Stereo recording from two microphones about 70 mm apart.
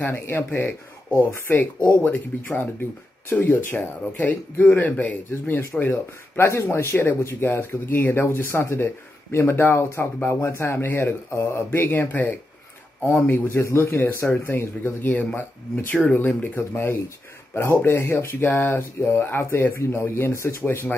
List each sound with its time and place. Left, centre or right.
0.1 s speech: left
5.3 s speech: left
15.7 s speech: centre
16.5 s speech: left